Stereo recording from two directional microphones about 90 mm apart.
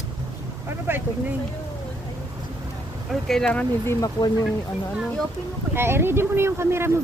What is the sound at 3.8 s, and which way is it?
Speech, 30° left (ahead or behind).